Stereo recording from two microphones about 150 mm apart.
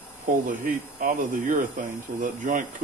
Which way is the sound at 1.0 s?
60° right (ahead or behind).